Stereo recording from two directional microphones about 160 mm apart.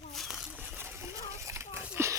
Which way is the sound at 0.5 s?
10° right (ahead or behind).